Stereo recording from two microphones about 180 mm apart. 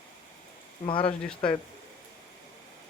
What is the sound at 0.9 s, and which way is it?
Speech, 30° left (ahead or behind).